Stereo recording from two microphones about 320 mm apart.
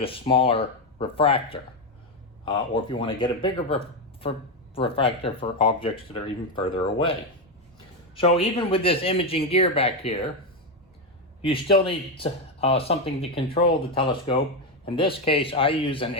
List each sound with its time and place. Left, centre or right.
0.0 s speech: centre
11.4 s speech: centre